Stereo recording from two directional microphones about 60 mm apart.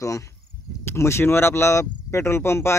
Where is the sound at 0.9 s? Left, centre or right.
Left.